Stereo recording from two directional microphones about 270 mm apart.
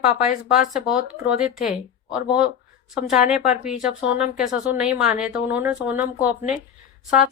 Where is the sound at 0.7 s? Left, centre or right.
Centre.